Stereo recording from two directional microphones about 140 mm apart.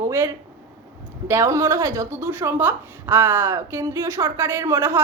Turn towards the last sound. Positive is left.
turn(degrees=-20)  # may be behind; listen again after turning